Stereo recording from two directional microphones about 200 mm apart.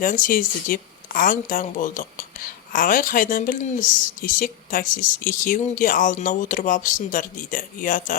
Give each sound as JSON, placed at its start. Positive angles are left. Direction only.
{"t": 0.0, "sound": "a woman's voice", "side_deg": 40}